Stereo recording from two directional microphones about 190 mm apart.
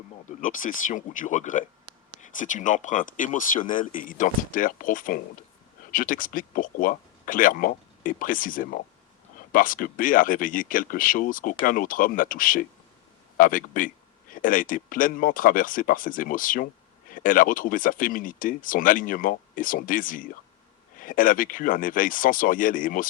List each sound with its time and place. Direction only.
0.3 s speech: 45° left (ahead or behind)